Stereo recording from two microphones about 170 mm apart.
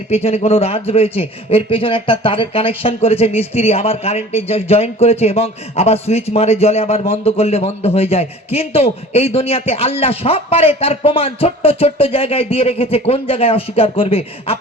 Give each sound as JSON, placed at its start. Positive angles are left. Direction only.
{"t": 0.1, "sound": "a man's voice", "side_deg": 35}